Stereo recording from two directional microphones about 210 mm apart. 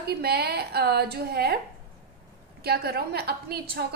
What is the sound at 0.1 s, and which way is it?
A woman's voice, 50° right (ahead or behind).